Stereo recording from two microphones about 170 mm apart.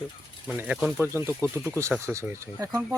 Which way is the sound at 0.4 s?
10° right (ahead or behind).